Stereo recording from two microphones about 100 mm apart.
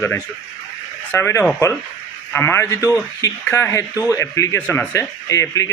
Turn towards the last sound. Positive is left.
turn(degrees=35)  # may be behind; listen again after turning